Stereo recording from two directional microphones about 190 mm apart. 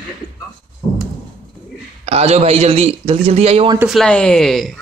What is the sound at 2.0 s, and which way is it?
A man's voice, 35° right (ahead or behind).